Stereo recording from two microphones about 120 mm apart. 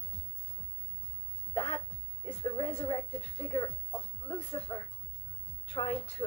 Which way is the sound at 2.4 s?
55° left (ahead or behind).